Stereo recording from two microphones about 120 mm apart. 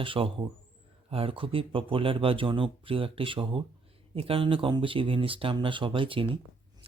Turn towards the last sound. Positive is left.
turn(degrees=-45)  # may be behind; listen again after turning